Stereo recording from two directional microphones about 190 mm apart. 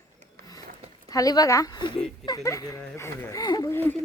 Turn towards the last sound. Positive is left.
turn(degrees=10)  # may be behind; listen again after turning